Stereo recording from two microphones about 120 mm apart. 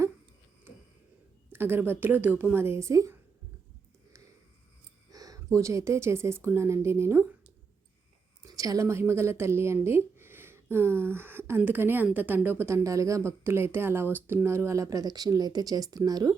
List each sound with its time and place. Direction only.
1.5 s speech: 20° right (ahead or behind)
5.1 s a sound: 30° right (ahead or behind)
5.5 s speech: 25° right (ahead or behind)
8.4 s a woman's voice: 30° right (ahead or behind)